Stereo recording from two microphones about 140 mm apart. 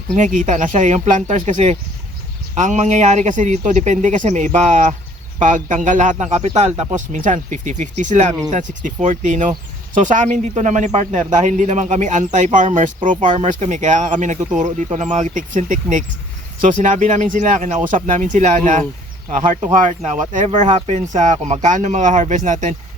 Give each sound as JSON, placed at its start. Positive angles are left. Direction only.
{"t": 0.2, "sound": "speech", "side_deg": -60}